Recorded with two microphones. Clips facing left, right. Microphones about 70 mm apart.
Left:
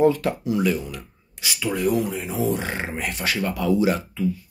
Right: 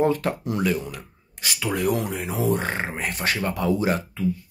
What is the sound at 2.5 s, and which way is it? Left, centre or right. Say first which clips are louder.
Speech: right 1 dB; right.